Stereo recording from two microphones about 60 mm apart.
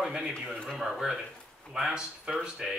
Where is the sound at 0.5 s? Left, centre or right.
Centre.